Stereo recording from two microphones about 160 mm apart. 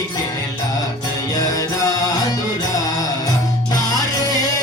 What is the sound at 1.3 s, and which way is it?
Music, 20° left (ahead or behind).